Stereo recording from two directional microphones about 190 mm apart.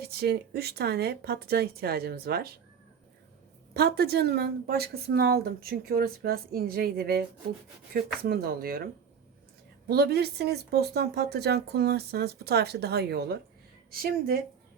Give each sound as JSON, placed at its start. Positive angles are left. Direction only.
{"t": 0.0, "sound": "speech", "side_deg": -55}
{"t": 3.8, "sound": "speech", "side_deg": -55}
{"t": 9.9, "sound": "speech", "side_deg": -55}